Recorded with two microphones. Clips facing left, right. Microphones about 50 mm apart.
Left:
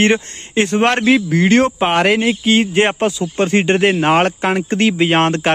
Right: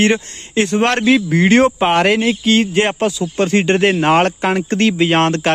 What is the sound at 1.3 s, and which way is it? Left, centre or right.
Speech, right.